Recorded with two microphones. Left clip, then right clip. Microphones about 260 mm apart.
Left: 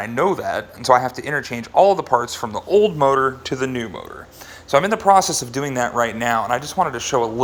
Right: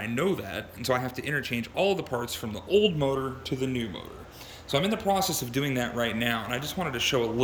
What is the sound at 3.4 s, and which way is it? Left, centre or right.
Speech, centre.